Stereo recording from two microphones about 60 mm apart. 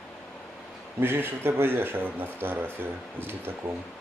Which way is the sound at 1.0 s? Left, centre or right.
Right.